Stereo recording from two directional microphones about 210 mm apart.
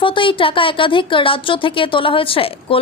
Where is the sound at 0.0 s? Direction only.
25° left (ahead or behind).